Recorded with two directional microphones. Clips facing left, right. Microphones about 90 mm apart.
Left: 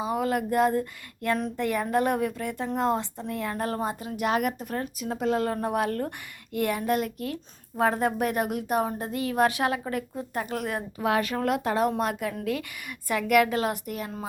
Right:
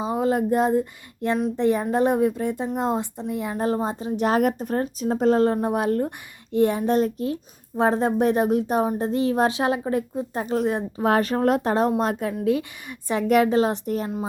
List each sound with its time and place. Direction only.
0.0 s speech: 25° right (ahead or behind)
5.5 s speech: 20° right (ahead or behind)
11.0 s speech: 35° right (ahead or behind)